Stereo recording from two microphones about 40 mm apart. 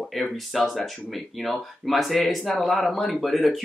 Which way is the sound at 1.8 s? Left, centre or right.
Centre.